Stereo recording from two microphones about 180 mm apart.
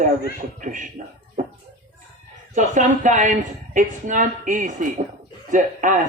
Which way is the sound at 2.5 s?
40° right (ahead or behind).